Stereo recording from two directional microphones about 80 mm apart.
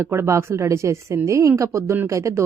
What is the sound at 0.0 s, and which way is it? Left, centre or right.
A woman's voice, right.